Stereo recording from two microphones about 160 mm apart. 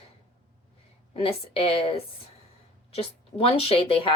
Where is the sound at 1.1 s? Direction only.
35° left (ahead or behind).